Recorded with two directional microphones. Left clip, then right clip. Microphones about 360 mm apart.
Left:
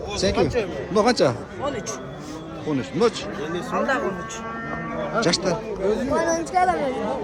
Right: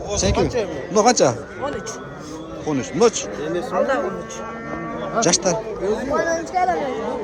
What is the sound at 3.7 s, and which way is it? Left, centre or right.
Speech, centre.